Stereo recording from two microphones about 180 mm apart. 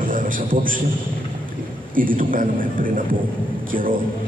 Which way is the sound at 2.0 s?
50° right (ahead or behind).